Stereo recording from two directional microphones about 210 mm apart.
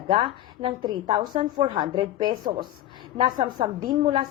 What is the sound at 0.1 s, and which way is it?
A woman's voice, 25° right (ahead or behind).